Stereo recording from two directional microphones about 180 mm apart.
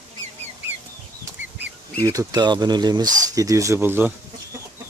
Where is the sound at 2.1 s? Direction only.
20° right (ahead or behind).